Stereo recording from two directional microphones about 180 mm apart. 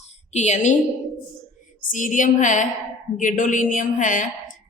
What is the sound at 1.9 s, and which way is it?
Speech, 45° left (ahead or behind).